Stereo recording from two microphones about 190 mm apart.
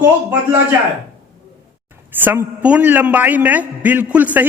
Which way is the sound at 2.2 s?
10° right (ahead or behind).